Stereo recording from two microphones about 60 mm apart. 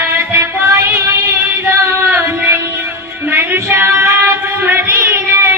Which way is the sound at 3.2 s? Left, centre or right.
Right.